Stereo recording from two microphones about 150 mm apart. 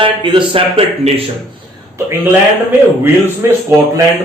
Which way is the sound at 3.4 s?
20° right (ahead or behind).